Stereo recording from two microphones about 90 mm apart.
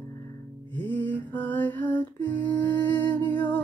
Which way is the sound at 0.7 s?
20° left (ahead or behind).